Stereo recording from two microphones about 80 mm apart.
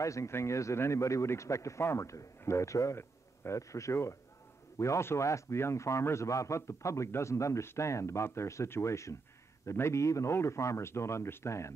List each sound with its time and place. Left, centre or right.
0.0 s a man's voice: left